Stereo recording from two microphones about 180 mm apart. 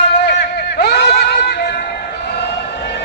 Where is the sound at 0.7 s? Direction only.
65° left (ahead or behind).